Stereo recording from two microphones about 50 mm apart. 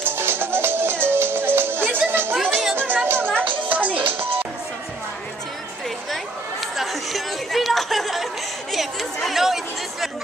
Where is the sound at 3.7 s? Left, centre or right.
Right.